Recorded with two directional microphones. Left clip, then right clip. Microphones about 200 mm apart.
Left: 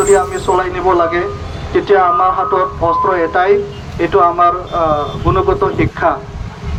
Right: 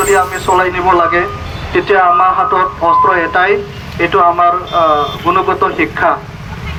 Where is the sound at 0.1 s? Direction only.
60° left (ahead or behind).